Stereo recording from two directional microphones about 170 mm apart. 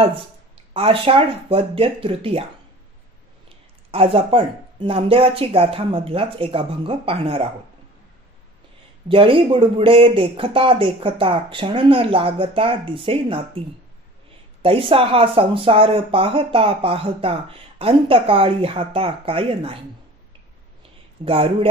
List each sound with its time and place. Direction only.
0.0 s speech: 35° right (ahead or behind)
3.4 s speech: 35° right (ahead or behind)
9.1 s speech: 30° right (ahead or behind)
21.2 s speech: 35° right (ahead or behind)